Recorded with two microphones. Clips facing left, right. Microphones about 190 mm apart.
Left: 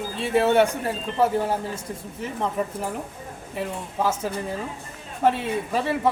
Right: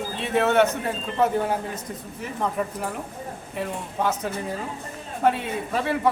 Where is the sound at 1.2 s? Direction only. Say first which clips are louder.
Even; 5° left (ahead or behind).